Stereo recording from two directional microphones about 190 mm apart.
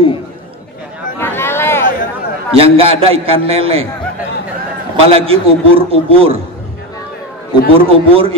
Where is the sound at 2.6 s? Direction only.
30° right (ahead or behind).